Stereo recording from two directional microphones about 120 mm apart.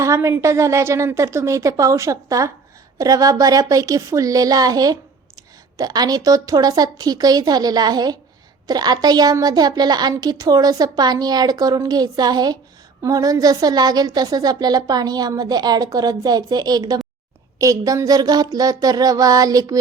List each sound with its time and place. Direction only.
0.0 s a woman's voice: 25° right (ahead or behind)